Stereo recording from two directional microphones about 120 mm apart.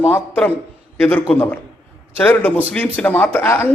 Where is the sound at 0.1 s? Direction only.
15° left (ahead or behind).